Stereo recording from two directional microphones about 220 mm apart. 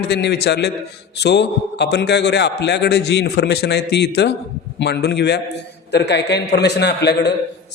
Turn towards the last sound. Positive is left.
turn(degrees=50)  # may be behind; listen again after turning